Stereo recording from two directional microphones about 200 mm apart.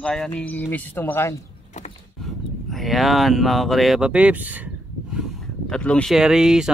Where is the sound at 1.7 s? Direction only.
35° left (ahead or behind).